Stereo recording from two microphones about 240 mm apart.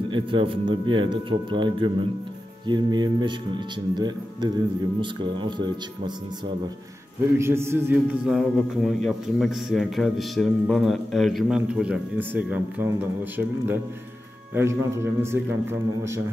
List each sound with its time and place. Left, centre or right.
0.1 s speech: right
7.3 s a man's voice: centre